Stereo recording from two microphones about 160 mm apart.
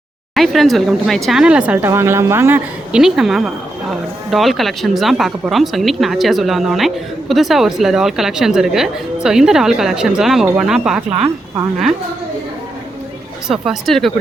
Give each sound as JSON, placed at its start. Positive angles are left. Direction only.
{"t": 0.3, "sound": "speech", "side_deg": 0}
{"t": 3.0, "sound": "speech", "side_deg": 0}
{"t": 13.5, "sound": "speech", "side_deg": 0}